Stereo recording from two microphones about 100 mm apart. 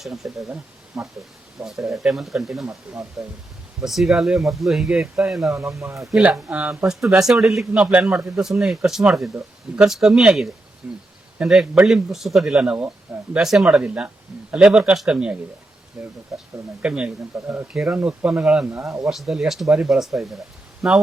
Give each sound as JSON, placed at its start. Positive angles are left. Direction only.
{"t": 0.0, "sound": "speech", "side_deg": -5}
{"t": 5.8, "sound": "speech", "side_deg": -30}
{"t": 6.1, "sound": "speech", "side_deg": -5}
{"t": 10.8, "sound": "speech", "side_deg": -15}
{"t": 17.3, "sound": "speech", "side_deg": -20}
{"t": 17.7, "sound": "speech", "side_deg": -10}
{"t": 18.6, "sound": "speech", "side_deg": -25}
{"t": 19.0, "sound": "speech", "side_deg": -5}